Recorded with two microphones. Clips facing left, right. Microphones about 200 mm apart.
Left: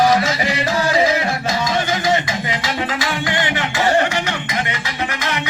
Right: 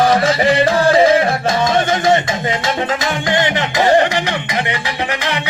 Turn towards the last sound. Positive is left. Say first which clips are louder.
# right 4 dB
turn(degrees=-15)  # may be behind; listen again after turning